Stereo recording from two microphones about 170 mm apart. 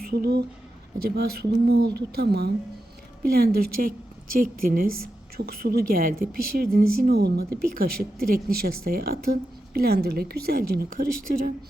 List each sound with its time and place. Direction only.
0.0 s a woman's voice: 65° right (ahead or behind)